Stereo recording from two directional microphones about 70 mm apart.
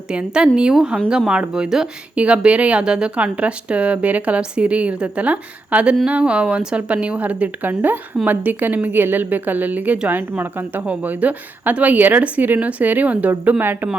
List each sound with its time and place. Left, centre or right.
0.1 s a woman's voice: centre